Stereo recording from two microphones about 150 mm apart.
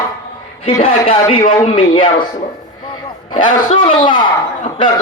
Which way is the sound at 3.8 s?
30° left (ahead or behind).